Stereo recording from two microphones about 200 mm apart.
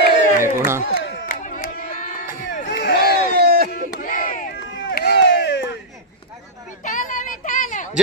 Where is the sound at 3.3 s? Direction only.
50° right (ahead or behind).